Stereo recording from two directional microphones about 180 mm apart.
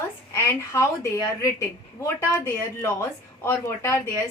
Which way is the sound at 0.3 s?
15° left (ahead or behind).